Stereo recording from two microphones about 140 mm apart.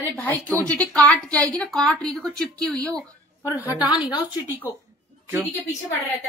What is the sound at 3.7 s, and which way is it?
Speech, 35° left (ahead or behind).